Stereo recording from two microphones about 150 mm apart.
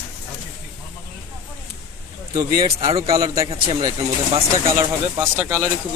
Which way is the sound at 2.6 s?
35° right (ahead or behind).